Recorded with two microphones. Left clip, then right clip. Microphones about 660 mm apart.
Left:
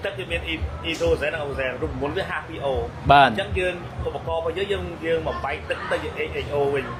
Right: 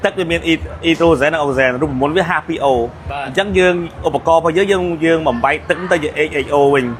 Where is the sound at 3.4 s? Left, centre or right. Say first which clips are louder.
Right 12 dB; right.